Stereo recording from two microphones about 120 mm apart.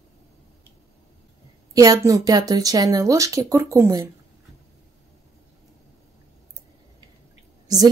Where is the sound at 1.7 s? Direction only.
30° right (ahead or behind).